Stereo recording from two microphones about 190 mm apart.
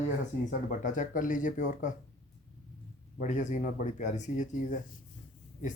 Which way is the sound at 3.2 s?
40° left (ahead or behind).